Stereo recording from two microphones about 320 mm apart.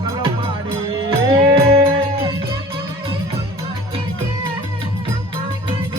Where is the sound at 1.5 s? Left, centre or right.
Centre.